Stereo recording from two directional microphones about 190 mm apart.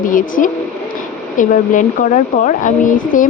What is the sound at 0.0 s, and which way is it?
Speech, 45° left (ahead or behind).